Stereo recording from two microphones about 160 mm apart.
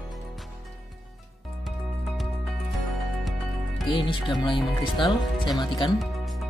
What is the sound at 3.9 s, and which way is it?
Speech, 30° left (ahead or behind).